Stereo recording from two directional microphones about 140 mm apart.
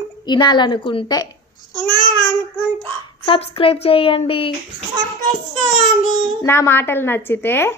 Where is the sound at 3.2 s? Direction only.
40° left (ahead or behind).